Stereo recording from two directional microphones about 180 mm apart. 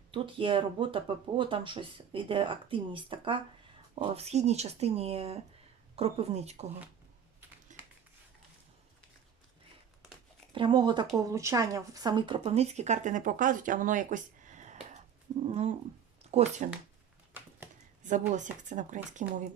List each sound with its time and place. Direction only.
0.1 s speech: 30° right (ahead or behind)
7.7 s typing: 45° right (ahead or behind)
10.5 s speech: 25° right (ahead or behind)
18.3 s speech: 45° right (ahead or behind)